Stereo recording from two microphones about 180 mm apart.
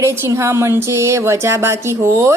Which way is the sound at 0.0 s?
15° right (ahead or behind).